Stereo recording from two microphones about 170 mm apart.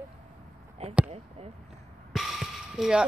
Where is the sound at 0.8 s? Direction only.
40° right (ahead or behind).